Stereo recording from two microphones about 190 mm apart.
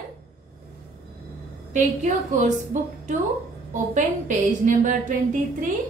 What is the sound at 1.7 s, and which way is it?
Speech, 40° right (ahead or behind).